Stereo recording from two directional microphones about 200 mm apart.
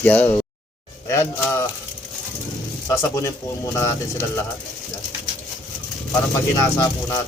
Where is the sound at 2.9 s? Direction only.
15° left (ahead or behind).